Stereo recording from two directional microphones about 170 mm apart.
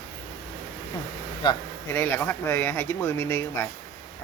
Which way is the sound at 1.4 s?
25° left (ahead or behind).